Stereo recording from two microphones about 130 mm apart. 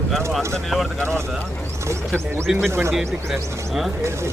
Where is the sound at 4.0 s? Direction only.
20° right (ahead or behind).